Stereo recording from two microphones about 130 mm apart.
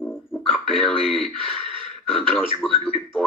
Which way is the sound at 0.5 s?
5° left (ahead or behind).